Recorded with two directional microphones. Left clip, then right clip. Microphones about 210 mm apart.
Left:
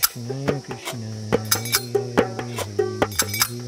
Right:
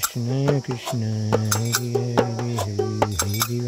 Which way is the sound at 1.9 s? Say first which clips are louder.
Left 1 dB; 10° left (ahead or behind).